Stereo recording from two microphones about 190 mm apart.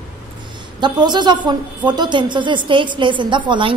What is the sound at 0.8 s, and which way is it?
A woman's voice, 25° right (ahead or behind).